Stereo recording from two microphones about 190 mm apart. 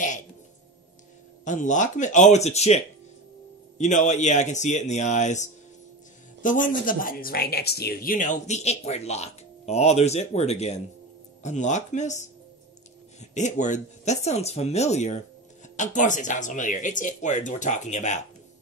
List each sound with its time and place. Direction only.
1.4 s speech: 40° left (ahead or behind)
6.4 s speech: 45° left (ahead or behind)